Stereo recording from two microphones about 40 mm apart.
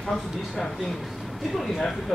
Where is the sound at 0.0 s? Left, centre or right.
Centre.